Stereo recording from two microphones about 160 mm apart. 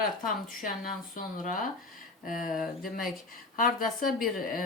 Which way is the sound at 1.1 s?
55° left (ahead or behind).